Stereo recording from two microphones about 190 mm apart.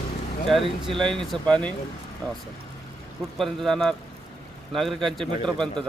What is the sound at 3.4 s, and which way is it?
Speech, centre (ahead or behind).